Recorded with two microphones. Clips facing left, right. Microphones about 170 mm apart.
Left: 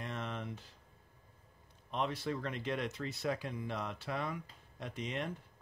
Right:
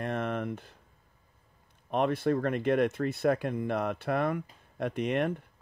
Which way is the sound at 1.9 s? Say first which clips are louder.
Right 10 dB; 55° right (ahead or behind).